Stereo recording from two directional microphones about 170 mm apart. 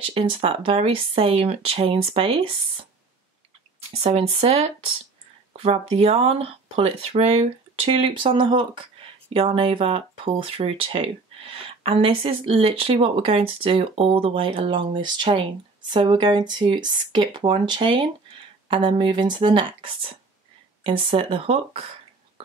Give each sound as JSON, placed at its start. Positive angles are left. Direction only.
{"t": 0.0, "sound": "speech", "side_deg": -30}
{"t": 4.0, "sound": "speech", "side_deg": -35}